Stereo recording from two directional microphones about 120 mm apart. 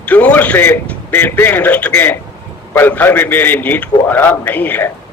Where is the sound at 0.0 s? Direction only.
10° left (ahead or behind).